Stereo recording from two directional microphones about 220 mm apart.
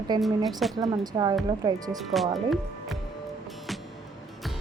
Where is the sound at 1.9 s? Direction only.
Centre (ahead or behind).